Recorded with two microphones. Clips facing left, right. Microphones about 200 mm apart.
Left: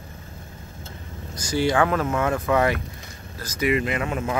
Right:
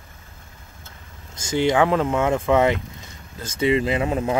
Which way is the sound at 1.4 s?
20° right (ahead or behind).